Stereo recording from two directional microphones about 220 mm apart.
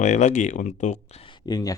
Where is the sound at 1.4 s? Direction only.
15° left (ahead or behind).